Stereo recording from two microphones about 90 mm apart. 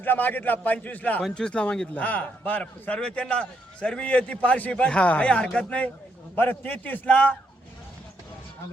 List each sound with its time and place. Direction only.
0.0 s a man's voice: 20° left (ahead or behind)